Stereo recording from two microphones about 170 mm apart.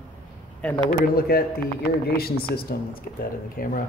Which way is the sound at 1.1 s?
65° left (ahead or behind).